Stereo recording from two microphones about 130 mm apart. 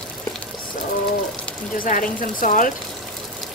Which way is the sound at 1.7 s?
90° left.